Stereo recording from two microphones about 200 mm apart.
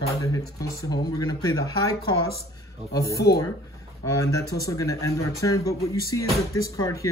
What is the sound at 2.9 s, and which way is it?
Speech, 15° left (ahead or behind).